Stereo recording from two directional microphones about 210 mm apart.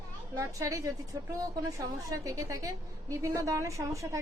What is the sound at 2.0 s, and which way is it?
A woman's voice, 15° right (ahead or behind).